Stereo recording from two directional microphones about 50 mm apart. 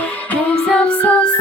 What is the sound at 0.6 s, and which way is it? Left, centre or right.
Music, centre.